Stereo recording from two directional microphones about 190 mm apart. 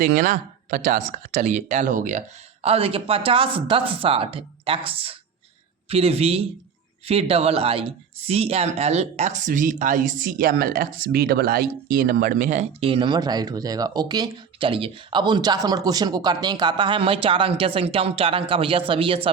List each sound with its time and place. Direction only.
0.0 s speech: 45° right (ahead or behind); by 19.3 s 30° right (ahead or behind)